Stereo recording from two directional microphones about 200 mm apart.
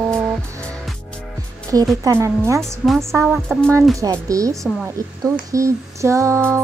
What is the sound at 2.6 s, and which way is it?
Speech, centre (ahead or behind).